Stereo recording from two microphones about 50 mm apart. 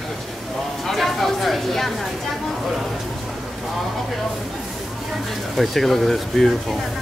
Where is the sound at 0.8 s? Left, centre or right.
Centre.